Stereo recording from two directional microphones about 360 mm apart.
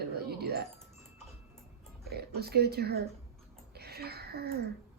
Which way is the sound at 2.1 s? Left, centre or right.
Right.